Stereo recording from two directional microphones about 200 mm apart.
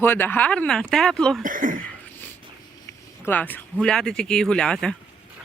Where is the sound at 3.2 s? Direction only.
10° left (ahead or behind).